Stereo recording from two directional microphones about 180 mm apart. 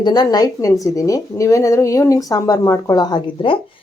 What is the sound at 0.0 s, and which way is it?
Speech, 20° left (ahead or behind).